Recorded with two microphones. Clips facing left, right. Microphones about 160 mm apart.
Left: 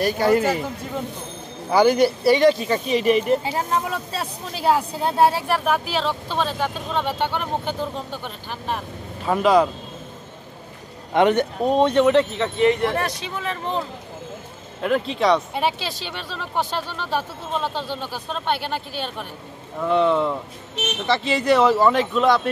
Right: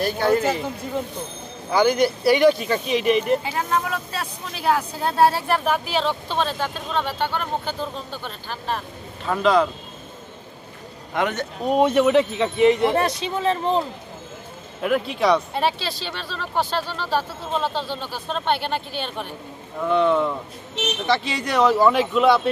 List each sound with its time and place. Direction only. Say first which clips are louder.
0.0 s speech: left 1 dB; 10° left (ahead or behind)
1.7 s speech: left 2 dB; 5° left (ahead or behind)
3.4 s speech: even; 25° left (ahead or behind)
5.7 s speech: even; centre (ahead or behind)
11.1 s speech: left 7 dB; 25° left (ahead or behind)
11.7 s speech: even; 10° right (ahead or behind); by 13.6 s 25° right (ahead or behind)
14.8 s speech: even; 5° right (ahead or behind)
15.5 s speech: right 1 dB; 15° left (ahead or behind); by 22.4 s 5° right (ahead or behind)